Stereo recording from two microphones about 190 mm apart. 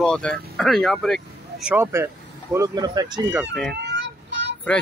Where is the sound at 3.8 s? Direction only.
65° right (ahead or behind).